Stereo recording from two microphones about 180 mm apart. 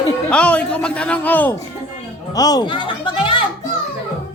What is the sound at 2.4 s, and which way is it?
Speech, 20° left (ahead or behind).